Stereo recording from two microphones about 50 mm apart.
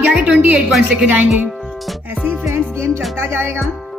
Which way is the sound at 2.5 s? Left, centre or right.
Right.